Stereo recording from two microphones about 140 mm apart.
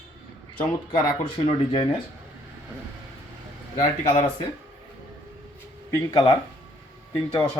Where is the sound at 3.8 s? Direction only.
50° left (ahead or behind).